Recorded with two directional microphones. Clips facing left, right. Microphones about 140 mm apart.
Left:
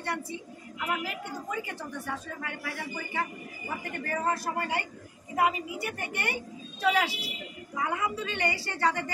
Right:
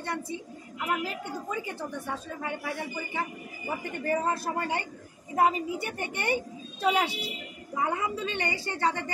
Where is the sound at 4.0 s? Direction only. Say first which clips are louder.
Right 2 dB; 25° right (ahead or behind).